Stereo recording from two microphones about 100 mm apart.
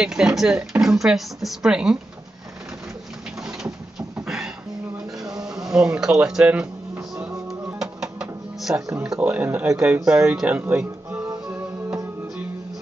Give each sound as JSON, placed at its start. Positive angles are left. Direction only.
{"t": 0.0, "sound": "speech", "side_deg": -5}
{"t": 3.3, "sound": "bird", "side_deg": -5}
{"t": 4.2, "sound": "a sound", "side_deg": -5}
{"t": 5.4, "sound": "speech", "side_deg": -5}
{"t": 7.4, "sound": "music", "side_deg": -5}
{"t": 8.9, "sound": "speech", "side_deg": -5}
{"t": 9.2, "sound": "speech", "side_deg": -15}